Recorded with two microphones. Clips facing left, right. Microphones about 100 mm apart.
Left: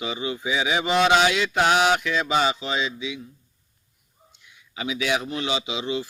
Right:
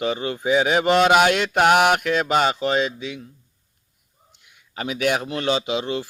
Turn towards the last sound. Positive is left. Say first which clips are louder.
# right 3 dB
turn(degrees=-50)  # may be behind; listen again after turning